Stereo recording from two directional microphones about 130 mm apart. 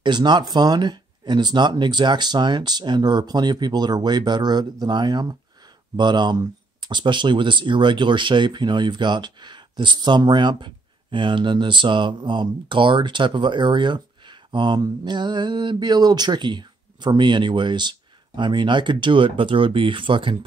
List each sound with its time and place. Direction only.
0.0 s speech: 35° right (ahead or behind)